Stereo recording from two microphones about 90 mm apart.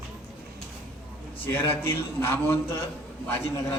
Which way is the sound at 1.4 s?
25° left (ahead or behind).